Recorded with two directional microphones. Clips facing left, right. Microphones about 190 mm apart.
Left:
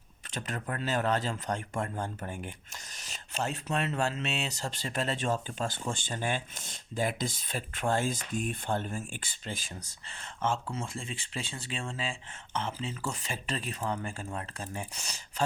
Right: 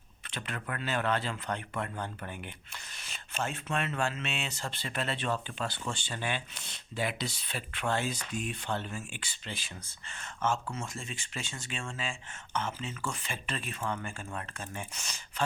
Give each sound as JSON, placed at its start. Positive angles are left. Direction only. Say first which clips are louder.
{"t": 0.3, "sound": "speech", "louder": "left 2 dB", "side_deg": 40}
{"t": 10.1, "sound": "speech", "louder": "even", "side_deg": 30}